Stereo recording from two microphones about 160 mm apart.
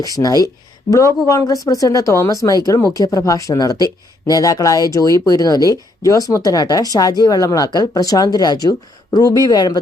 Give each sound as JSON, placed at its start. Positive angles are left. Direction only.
{"t": 0.0, "sound": "speech", "side_deg": 25}